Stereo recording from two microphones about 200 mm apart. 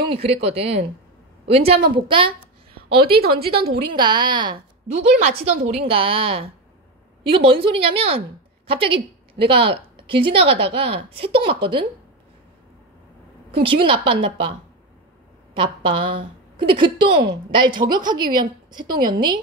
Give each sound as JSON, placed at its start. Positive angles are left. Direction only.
{"t": 0.1, "sound": "a woman's voice", "side_deg": -30}
{"t": 2.0, "sound": "a woman's voice", "side_deg": -25}
{"t": 3.1, "sound": "a woman's voice", "side_deg": -50}
{"t": 4.0, "sound": "a woman's voice", "side_deg": -20}
{"t": 13.6, "sound": "a woman's voice", "side_deg": -25}
{"t": 15.5, "sound": "a woman's voice", "side_deg": -25}